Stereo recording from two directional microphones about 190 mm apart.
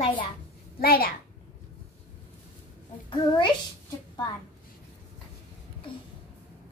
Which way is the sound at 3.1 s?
25° left (ahead or behind).